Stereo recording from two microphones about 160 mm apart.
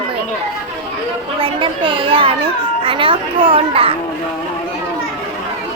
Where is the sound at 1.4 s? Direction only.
35° right (ahead or behind).